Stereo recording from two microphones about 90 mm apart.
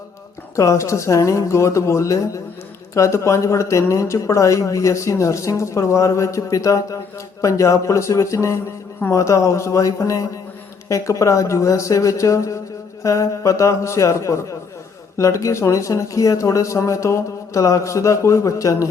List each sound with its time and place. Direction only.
0.5 s speech: 35° left (ahead or behind)